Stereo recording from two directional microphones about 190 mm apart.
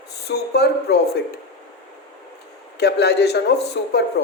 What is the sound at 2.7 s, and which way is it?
Speech, 60° left (ahead or behind).